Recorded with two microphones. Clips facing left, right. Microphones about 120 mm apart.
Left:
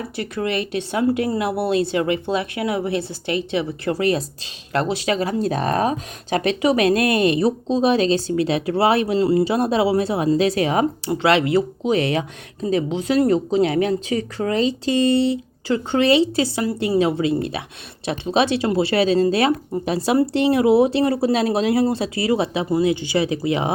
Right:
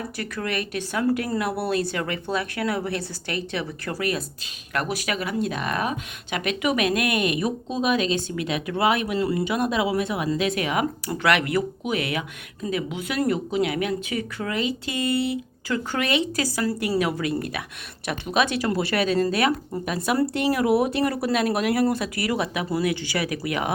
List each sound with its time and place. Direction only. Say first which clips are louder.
0.2 s speech: left 6 dB; 25° left (ahead or behind)